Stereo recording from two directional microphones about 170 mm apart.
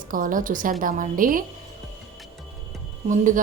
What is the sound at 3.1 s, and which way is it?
Speech, 50° right (ahead or behind).